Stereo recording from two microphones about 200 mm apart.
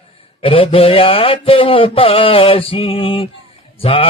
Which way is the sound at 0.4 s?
25° left (ahead or behind).